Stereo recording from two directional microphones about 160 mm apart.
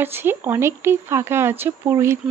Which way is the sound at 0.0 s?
15° right (ahead or behind).